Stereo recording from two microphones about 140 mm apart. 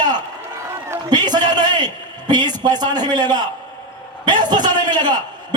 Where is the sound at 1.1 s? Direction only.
30° right (ahead or behind).